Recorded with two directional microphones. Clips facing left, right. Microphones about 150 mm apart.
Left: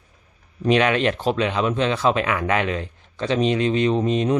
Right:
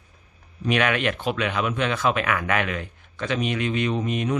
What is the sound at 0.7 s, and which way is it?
Speech, 25° left (ahead or behind).